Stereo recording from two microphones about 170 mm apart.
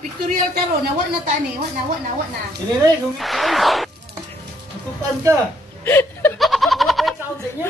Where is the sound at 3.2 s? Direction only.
Centre (ahead or behind).